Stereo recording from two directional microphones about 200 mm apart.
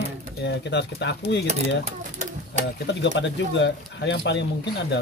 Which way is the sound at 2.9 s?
60° left (ahead or behind).